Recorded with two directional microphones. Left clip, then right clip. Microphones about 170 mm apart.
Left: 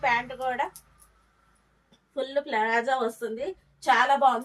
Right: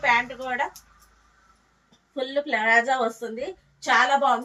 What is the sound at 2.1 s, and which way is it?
A woman's voice, 20° left (ahead or behind).